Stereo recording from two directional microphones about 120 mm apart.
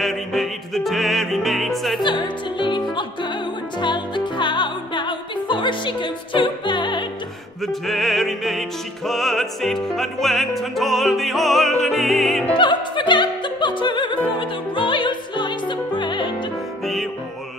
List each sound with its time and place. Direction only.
0.0 s music: centre (ahead or behind)
2.0 s music: 40° left (ahead or behind)
7.6 s music: centre (ahead or behind)
12.5 s opera: 40° left (ahead or behind)
16.8 s music: centre (ahead or behind)